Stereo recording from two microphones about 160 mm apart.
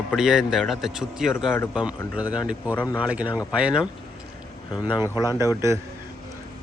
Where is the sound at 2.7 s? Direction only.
10° left (ahead or behind).